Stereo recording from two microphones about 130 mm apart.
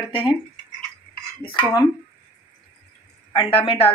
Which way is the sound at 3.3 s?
40° left (ahead or behind).